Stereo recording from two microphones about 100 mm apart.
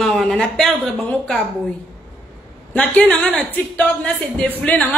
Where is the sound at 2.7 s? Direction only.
15° left (ahead or behind).